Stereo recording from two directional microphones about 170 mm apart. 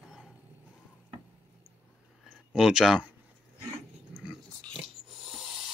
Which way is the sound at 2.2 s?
5° right (ahead or behind).